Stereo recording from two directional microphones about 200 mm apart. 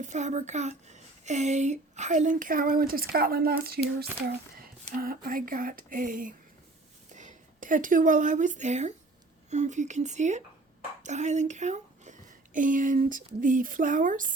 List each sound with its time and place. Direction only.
0.0 s a woman's voice: 35° right (ahead or behind)